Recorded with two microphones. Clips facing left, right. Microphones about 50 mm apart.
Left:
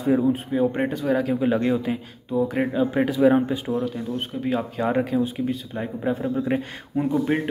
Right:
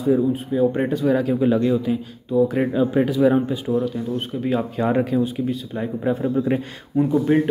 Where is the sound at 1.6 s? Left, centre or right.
Left.